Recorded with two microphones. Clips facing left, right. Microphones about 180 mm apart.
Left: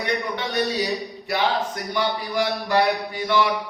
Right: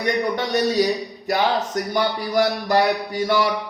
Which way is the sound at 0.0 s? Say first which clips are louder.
Right 4 dB; 45° right (ahead or behind).